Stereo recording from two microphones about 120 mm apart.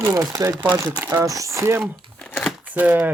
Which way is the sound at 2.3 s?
15° left (ahead or behind).